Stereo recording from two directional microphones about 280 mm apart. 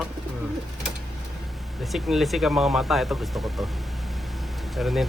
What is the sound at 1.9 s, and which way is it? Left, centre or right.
Speech, centre.